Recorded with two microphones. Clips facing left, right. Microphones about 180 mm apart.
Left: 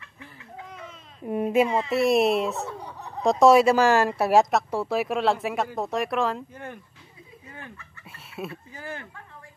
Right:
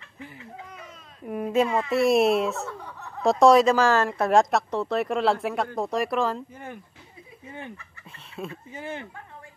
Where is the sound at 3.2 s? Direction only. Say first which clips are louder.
Even; 5° left (ahead or behind).